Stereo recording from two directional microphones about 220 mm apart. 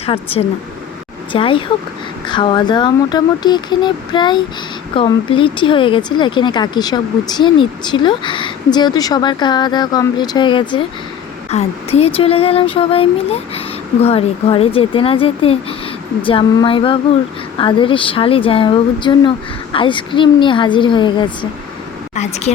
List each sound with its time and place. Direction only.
0.0 s speech: 25° left (ahead or behind)